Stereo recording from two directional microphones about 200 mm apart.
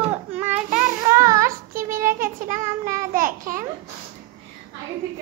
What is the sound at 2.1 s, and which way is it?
Child singing, 40° right (ahead or behind).